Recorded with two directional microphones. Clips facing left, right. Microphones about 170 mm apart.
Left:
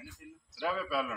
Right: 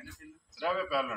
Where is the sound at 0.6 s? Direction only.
Centre (ahead or behind).